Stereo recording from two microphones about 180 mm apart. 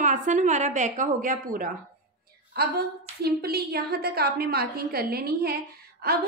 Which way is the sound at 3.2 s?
60° right (ahead or behind).